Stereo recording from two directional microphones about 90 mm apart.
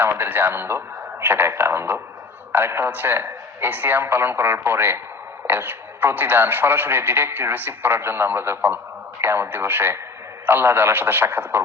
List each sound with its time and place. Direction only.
0.0 s speech: 25° right (ahead or behind)